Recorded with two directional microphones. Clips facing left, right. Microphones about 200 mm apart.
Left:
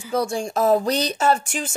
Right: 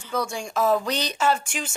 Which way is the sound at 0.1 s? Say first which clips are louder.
Left 5 dB; 35° left (ahead or behind).